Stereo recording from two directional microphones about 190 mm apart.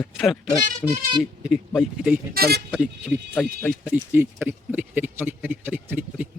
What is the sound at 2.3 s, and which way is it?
Speech, 55° right (ahead or behind).